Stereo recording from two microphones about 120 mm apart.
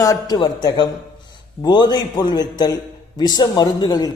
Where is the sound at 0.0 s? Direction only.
30° left (ahead or behind).